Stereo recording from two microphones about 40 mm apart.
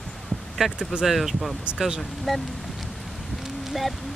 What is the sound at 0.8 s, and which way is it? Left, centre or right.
Speech, centre.